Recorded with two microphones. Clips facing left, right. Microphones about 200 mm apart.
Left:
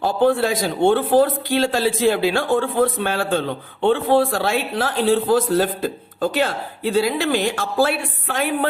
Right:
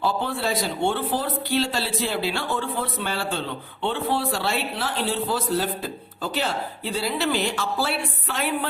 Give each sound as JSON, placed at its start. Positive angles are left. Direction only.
{"t": 0.0, "sound": "speech", "side_deg": 50}